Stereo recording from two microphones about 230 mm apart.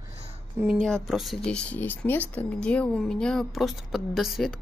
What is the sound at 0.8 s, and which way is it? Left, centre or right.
Speech, centre.